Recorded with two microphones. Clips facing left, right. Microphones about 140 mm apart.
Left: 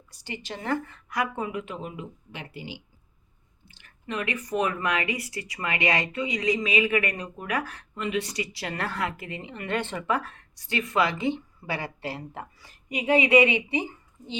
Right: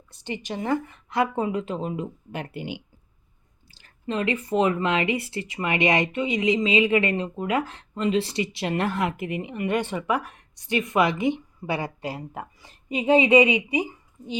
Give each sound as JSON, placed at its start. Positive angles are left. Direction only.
{"t": 0.1, "sound": "speech", "side_deg": -20}
{"t": 3.7, "sound": "speech", "side_deg": -35}